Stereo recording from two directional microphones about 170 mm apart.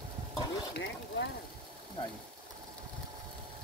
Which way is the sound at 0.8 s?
90° left.